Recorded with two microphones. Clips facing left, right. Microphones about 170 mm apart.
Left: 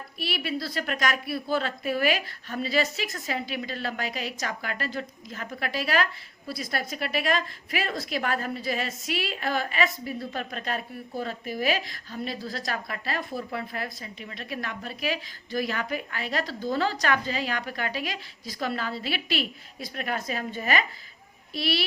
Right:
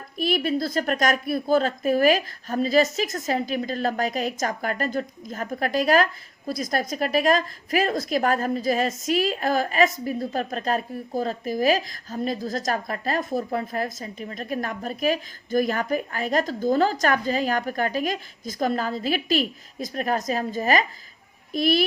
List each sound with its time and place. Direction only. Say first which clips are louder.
0.2 s a woman's voice: right 8 dB; 45° right (ahead or behind)